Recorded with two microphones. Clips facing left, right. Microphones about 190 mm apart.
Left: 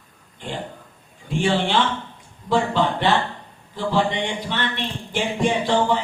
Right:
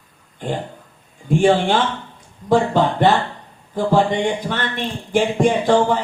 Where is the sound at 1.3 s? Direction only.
45° right (ahead or behind).